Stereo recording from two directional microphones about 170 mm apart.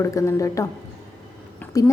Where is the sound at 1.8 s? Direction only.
20° left (ahead or behind).